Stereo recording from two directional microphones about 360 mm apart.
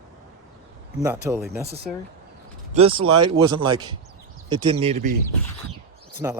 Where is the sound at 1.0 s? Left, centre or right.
Centre.